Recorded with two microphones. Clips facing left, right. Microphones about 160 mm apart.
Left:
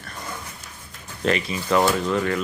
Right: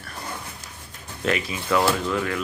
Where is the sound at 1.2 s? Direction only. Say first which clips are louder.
Left 2 dB; 5° right (ahead or behind).